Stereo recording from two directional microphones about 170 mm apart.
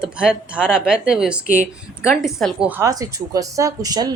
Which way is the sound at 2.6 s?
15° right (ahead or behind).